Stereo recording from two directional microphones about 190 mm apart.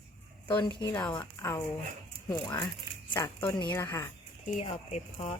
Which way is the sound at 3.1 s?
20° left (ahead or behind).